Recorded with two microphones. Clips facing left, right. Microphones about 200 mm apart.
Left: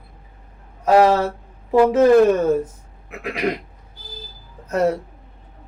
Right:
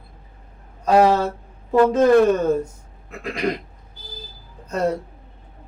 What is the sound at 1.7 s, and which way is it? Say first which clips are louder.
Speech: left 2 dB; 10° left (ahead or behind).